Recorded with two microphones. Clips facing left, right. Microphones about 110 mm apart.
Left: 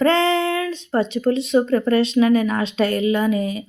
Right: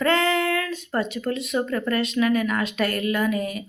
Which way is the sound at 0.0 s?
30° left (ahead or behind).